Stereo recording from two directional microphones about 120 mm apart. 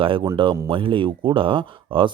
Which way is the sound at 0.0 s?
45° right (ahead or behind).